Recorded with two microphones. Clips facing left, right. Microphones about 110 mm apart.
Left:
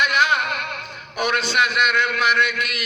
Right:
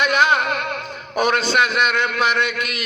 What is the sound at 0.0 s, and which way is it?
Music, 30° right (ahead or behind).